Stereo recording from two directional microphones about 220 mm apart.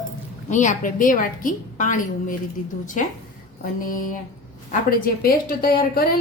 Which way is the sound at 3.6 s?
40° left (ahead or behind).